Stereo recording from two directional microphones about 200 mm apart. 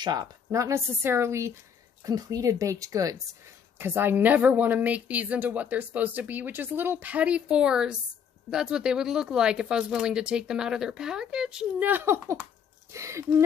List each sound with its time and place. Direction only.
0.0 s a woman's voice: 20° right (ahead or behind)